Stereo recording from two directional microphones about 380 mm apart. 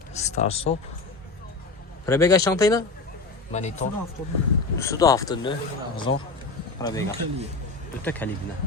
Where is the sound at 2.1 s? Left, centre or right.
Centre.